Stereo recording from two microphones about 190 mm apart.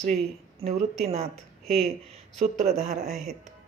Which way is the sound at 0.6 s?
35° right (ahead or behind).